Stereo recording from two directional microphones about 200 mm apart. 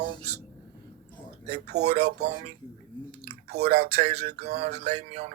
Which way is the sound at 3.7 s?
30° right (ahead or behind).